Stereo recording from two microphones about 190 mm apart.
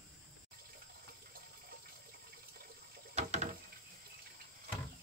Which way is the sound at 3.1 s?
35° right (ahead or behind).